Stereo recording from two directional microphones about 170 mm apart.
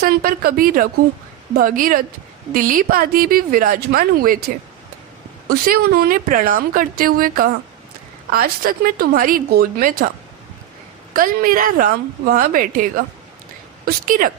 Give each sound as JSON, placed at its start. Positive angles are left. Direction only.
{"t": 0.0, "sound": "a woman's voice", "side_deg": -60}
{"t": 5.6, "sound": "a woman's voice", "side_deg": -60}
{"t": 11.1, "sound": "a woman's voice", "side_deg": -55}